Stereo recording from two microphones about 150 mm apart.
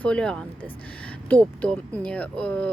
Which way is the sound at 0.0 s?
5° left (ahead or behind).